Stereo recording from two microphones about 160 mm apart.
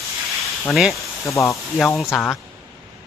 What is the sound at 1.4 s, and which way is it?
Speech, 20° left (ahead or behind).